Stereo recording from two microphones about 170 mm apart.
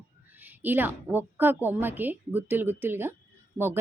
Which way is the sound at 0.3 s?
10° right (ahead or behind).